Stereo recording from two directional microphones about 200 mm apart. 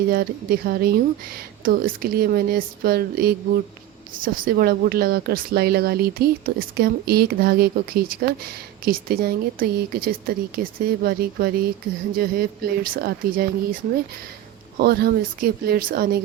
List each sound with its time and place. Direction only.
0.1 s speech: 50° right (ahead or behind)
14.8 s speech: 50° right (ahead or behind)